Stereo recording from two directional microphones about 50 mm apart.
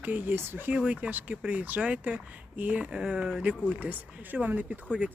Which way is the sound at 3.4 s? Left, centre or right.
Right.